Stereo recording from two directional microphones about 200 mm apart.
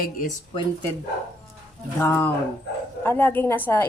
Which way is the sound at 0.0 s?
45° left (ahead or behind).